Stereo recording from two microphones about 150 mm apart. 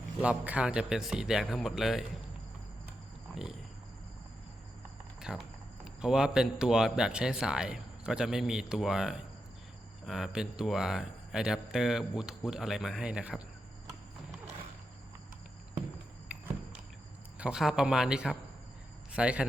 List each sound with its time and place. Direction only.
0.2 s speech: 10° right (ahead or behind)
5.2 s a man's voice: 5° right (ahead or behind)
17.3 s a man's voice: 5° right (ahead or behind)